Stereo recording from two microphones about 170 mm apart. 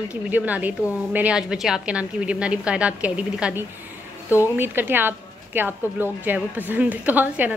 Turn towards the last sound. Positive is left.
turn(degrees=-10)  # may be behind; listen again after turning